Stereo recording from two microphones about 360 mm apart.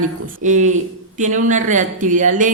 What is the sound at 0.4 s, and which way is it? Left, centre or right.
A woman's voice, centre.